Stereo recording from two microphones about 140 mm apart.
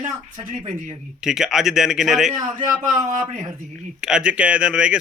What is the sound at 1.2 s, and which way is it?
Speech, 5° right (ahead or behind).